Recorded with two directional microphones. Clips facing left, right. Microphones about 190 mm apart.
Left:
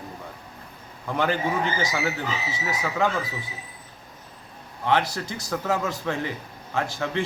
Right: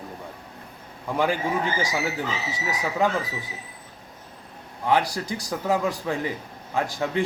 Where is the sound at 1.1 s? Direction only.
10° right (ahead or behind).